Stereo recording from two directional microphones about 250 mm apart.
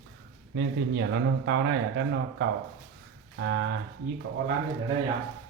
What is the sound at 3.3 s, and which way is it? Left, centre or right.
Speech, right.